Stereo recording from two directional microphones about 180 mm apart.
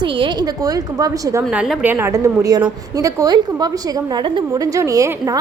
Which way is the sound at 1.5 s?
5° right (ahead or behind).